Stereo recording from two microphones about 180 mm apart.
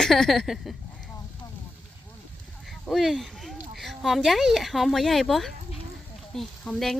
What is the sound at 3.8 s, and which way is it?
A woman's voice, centre (ahead or behind).